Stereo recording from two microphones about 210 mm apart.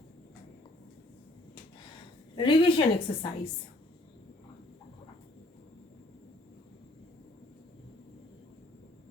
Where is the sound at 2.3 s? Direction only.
25° left (ahead or behind).